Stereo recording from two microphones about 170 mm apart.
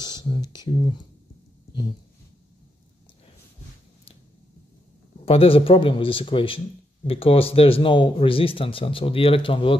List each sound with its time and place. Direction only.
0.0 s a sound: 25° left (ahead or behind)
0.6 s speech: 30° left (ahead or behind)
5.2 s speech: 35° left (ahead or behind)